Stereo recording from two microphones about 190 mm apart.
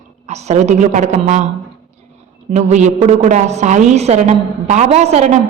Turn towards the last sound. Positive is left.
turn(degrees=-35)  # may be behind; listen again after turning